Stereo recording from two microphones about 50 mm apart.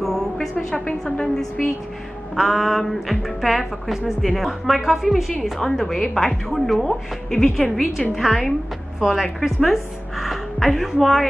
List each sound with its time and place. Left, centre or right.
0.0 s a sound: centre
0.8 s a woman's voice: centre
2.3 s a woman's voice: centre